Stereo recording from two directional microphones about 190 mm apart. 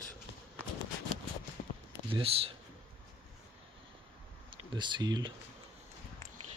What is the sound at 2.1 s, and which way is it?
Speech, 30° right (ahead or behind).